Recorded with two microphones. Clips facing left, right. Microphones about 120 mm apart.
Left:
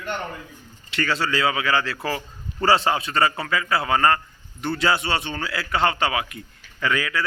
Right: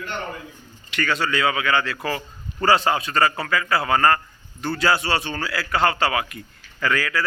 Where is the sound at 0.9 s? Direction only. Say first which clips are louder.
Even; 30° left (ahead or behind).